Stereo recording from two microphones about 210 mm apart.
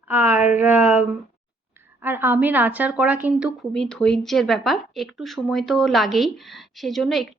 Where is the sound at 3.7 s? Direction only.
5° left (ahead or behind).